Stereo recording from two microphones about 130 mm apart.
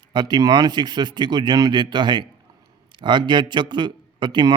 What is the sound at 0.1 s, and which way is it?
A man's voice, 35° right (ahead or behind).